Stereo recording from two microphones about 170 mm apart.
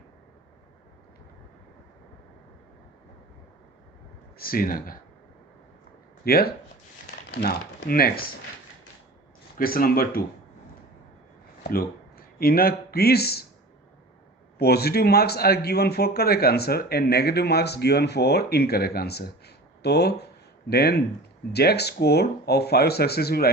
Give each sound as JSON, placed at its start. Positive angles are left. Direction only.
{"t": 4.4, "sound": "speech", "side_deg": 60}
{"t": 6.2, "sound": "speech", "side_deg": 65}
{"t": 9.6, "sound": "speech", "side_deg": 60}
{"t": 11.7, "sound": "speech", "side_deg": 60}
{"t": 14.6, "sound": "speech", "side_deg": 70}